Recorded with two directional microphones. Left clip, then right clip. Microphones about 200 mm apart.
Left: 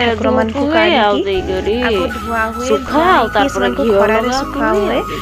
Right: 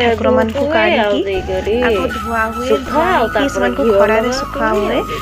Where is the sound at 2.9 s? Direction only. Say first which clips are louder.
Left 4 dB; 20° left (ahead or behind).